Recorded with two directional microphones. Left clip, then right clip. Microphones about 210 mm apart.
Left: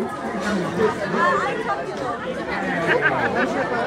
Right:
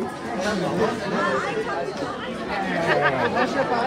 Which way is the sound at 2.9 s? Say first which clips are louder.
Left 1 dB; 45° right (ahead or behind).